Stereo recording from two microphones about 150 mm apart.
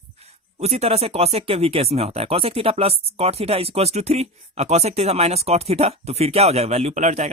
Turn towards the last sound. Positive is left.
turn(degrees=-50)  # may be behind; listen again after turning